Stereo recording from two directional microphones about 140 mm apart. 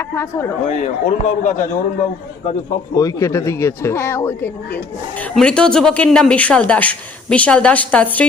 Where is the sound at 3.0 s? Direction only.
20° left (ahead or behind).